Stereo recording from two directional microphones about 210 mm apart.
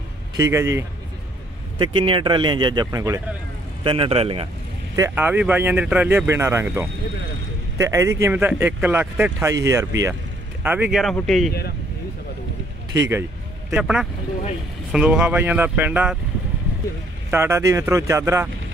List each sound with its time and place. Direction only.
0.4 s speech: 15° right (ahead or behind)
1.8 s speech: 25° right (ahead or behind)
4.9 s speech: 10° right (ahead or behind)
12.9 s speech: 15° right (ahead or behind)
13.7 s speech: 5° right (ahead or behind)
17.3 s speech: 10° right (ahead or behind)